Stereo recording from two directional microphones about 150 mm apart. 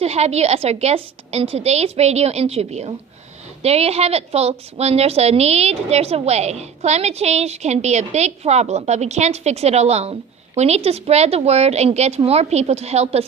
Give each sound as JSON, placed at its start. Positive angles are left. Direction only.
{"t": 0.0, "sound": "a woman's voice", "side_deg": -45}